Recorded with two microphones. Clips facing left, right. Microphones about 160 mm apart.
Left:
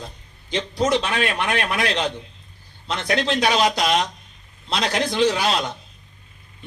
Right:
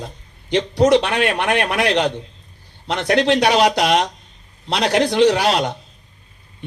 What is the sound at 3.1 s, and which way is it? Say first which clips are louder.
A man's voice: right 5 dB; 70° right (ahead or behind).